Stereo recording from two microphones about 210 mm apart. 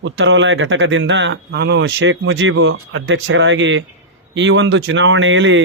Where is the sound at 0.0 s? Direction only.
65° right (ahead or behind).